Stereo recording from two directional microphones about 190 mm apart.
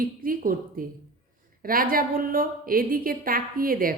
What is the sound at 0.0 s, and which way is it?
A woman's voice, 50° right (ahead or behind).